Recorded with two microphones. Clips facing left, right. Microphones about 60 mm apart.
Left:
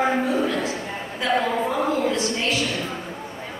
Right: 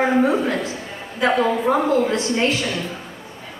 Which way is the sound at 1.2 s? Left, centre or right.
Right.